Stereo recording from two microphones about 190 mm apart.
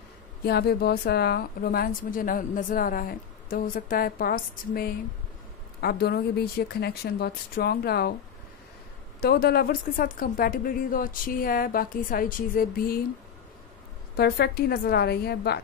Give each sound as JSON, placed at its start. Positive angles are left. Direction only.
{"t": 0.5, "sound": "a woman's voice", "side_deg": 55}
{"t": 9.2, "sound": "a woman's voice", "side_deg": 55}
{"t": 14.1, "sound": "speech", "side_deg": 55}